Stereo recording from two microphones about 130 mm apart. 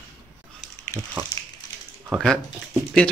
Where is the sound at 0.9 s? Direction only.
25° left (ahead or behind).